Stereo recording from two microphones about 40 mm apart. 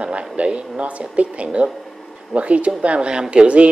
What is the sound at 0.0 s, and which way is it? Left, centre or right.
Speech, right.